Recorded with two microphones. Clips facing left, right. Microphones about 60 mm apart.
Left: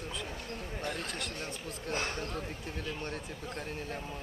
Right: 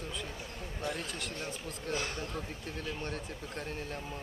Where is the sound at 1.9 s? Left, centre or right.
Left.